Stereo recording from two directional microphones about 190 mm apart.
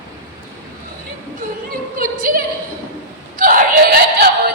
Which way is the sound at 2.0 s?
45° right (ahead or behind).